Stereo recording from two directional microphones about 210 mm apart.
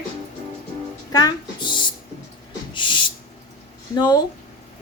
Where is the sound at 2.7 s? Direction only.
20° left (ahead or behind).